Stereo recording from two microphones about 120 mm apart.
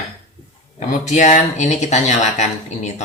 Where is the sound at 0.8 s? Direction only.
75° left (ahead or behind).